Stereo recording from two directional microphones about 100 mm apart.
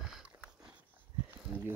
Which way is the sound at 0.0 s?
5° right (ahead or behind).